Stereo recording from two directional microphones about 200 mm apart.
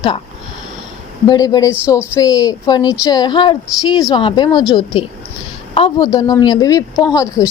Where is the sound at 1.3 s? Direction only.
20° left (ahead or behind).